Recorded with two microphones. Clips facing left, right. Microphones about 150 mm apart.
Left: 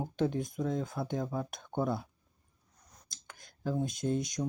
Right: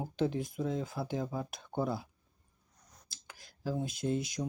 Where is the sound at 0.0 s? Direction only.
5° right (ahead or behind).